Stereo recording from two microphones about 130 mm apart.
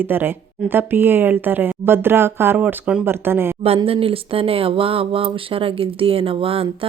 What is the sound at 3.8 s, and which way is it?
Speech, 45° right (ahead or behind).